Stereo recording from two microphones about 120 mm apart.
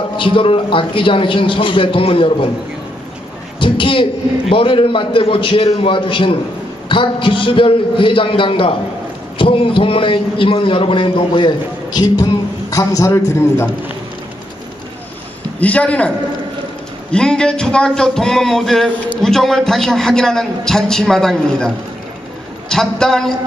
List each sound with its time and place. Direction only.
0.2 s a man's voice: 45° left (ahead or behind)
3.5 s a man's voice: 45° left (ahead or behind); by 13.7 s 20° left (ahead or behind)
15.6 s speech: 10° left (ahead or behind)
17.1 s a man's voice: 5° left (ahead or behind)